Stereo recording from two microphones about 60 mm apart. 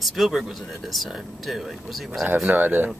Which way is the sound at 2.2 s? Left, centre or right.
Right.